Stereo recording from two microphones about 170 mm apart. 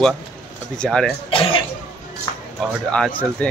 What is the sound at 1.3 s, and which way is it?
Cough, 30° left (ahead or behind).